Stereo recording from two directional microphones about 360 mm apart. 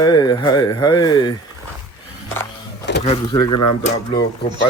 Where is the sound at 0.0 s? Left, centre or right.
Centre.